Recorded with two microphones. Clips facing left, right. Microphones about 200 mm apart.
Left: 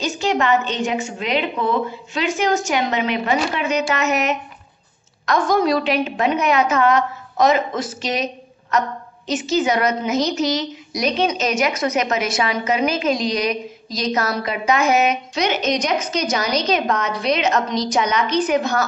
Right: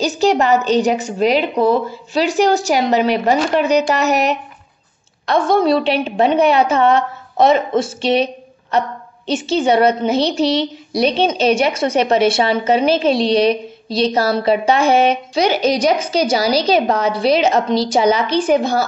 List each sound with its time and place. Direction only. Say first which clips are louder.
0.2 s a woman's voice: right 4 dB; 40° right (ahead or behind)